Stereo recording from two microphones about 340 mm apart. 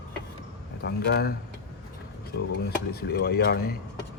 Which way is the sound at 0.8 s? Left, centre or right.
Left.